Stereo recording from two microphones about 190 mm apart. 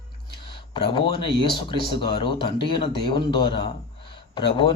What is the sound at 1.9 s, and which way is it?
A man's voice, 25° left (ahead or behind).